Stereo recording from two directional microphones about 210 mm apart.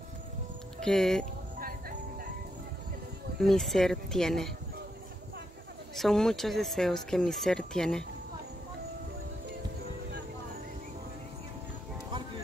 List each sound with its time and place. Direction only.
0.7 s speech: centre (ahead or behind)
1.6 s music: 45° right (ahead or behind)
3.3 s speech: centre (ahead or behind)
5.9 s speech: centre (ahead or behind)